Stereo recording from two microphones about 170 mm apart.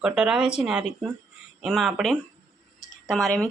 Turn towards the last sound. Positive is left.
turn(degrees=0)  # may be behind; listen again after turning